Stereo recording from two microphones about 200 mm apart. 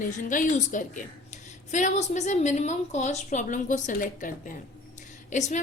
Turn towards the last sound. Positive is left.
turn(degrees=35)  # may be behind; listen again after turning